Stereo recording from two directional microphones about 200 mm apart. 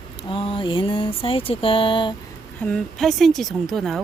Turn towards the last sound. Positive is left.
turn(degrees=0)  # may be behind; listen again after turning